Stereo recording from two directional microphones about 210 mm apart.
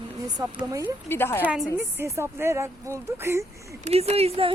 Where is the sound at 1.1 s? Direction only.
10° left (ahead or behind).